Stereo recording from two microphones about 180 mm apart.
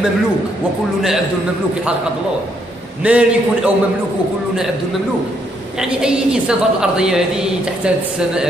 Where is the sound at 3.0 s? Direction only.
5° right (ahead or behind).